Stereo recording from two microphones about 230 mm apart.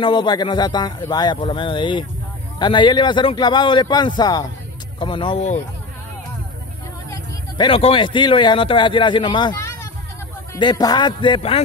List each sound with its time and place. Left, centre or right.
0.0 s speech: centre
7.1 s speech: centre